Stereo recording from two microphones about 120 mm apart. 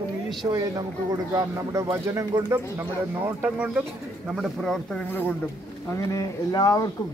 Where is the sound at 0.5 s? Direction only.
30° right (ahead or behind); by 3.8 s 10° right (ahead or behind).